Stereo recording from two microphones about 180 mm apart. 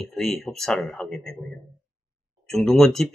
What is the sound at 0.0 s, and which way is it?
Speech, centre (ahead or behind).